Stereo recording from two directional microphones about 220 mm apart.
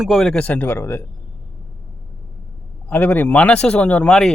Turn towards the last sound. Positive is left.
turn(degrees=5)  # may be behind; listen again after turning